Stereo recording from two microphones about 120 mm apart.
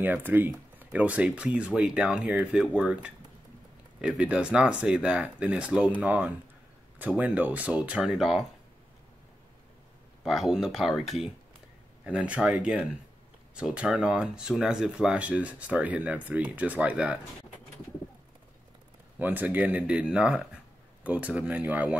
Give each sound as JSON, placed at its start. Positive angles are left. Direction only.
{"t": 0.0, "sound": "speech", "side_deg": -15}
{"t": 10.2, "sound": "speech", "side_deg": -5}
{"t": 19.1, "sound": "speech", "side_deg": -15}